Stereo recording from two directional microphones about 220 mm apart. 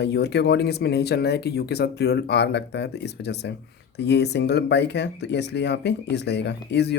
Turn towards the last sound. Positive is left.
turn(degrees=50)  # may be behind; listen again after turning